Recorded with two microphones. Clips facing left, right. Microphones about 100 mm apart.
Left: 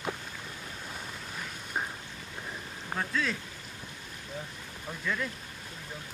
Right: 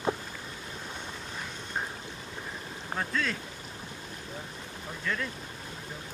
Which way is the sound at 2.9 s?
Centre (ahead or behind).